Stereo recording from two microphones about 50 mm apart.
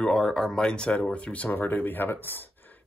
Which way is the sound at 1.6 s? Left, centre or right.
Left.